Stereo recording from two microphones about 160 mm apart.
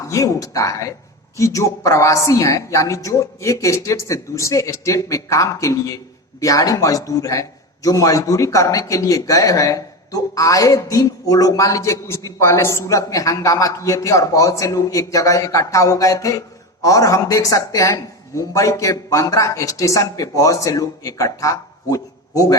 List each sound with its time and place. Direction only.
0.1 s a man's voice: 20° left (ahead or behind)